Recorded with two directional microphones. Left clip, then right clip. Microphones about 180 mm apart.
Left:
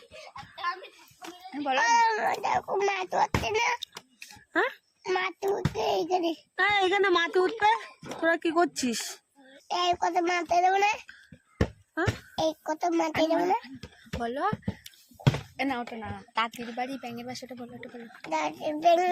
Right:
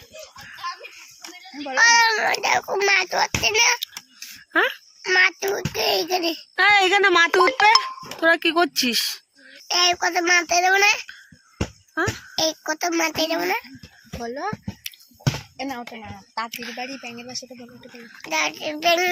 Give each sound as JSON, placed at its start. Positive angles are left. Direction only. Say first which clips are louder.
{"t": 1.6, "sound": "baby cry", "louder": "right 7 dB", "side_deg": 0}
{"t": 2.4, "sound": "a child's voice", "louder": "right 6 dB", "side_deg": -10}
{"t": 4.5, "sound": "a child's voice", "louder": "right 7 dB", "side_deg": -20}
{"t": 5.0, "sound": "a sound", "louder": "right 11 dB", "side_deg": -5}
{"t": 5.5, "sound": "a child's voice", "louder": "right 6 dB", "side_deg": -5}
{"t": 6.6, "sound": "speech", "louder": "right 8 dB", "side_deg": -30}
{"t": 9.6, "sound": "a child's voice", "louder": "right 7 dB", "side_deg": 0}
{"t": 12.4, "sound": "a child's voice", "louder": "right 5 dB", "side_deg": 0}
{"t": 14.2, "sound": "speech", "louder": "right 1 dB", "side_deg": -20}
{"t": 15.6, "sound": "a child's voice", "louder": "left 1 dB", "side_deg": 0}
{"t": 18.3, "sound": "a child's voice", "louder": "right 6 dB", "side_deg": 5}